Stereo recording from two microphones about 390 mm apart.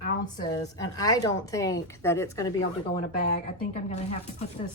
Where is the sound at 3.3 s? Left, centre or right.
Centre.